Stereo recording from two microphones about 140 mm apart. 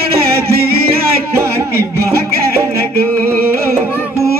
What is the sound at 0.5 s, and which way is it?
Music, 90° right.